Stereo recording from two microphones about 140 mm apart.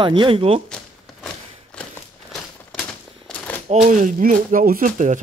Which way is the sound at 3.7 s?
55° right (ahead or behind).